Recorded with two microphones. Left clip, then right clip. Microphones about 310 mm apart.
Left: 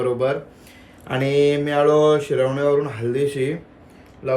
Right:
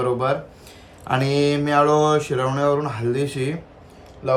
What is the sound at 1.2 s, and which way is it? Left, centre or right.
Speech, right.